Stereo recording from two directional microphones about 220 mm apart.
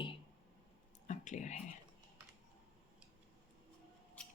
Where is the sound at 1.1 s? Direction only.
35° left (ahead or behind).